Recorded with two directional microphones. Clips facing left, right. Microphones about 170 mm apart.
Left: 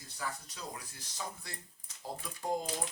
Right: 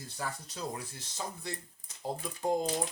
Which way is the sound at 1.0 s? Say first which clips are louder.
Right 3 dB; 25° right (ahead or behind).